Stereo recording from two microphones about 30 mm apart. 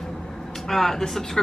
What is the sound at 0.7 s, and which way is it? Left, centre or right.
Speech, centre.